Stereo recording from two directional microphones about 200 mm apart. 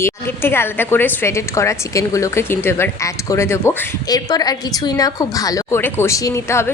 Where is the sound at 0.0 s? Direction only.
10° left (ahead or behind).